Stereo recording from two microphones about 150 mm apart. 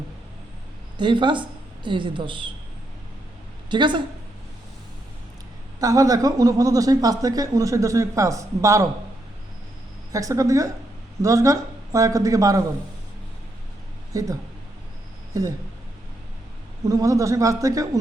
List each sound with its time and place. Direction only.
0.9 s a woman's voice: 30° right (ahead or behind)
3.7 s a woman's voice: 30° right (ahead or behind)
5.8 s speech: 25° right (ahead or behind)
10.1 s speech: 20° right (ahead or behind)
14.1 s speech: 20° right (ahead or behind)
16.8 s speech: 20° right (ahead or behind)